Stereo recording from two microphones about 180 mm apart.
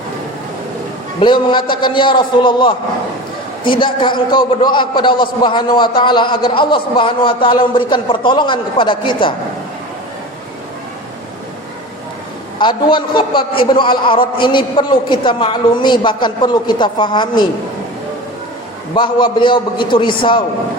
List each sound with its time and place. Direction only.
1.2 s a man's voice: 25° left (ahead or behind)
12.5 s a man's voice: 25° left (ahead or behind)
18.9 s a man's voice: 25° left (ahead or behind)